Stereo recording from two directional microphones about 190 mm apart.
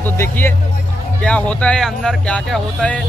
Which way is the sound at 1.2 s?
5° left (ahead or behind).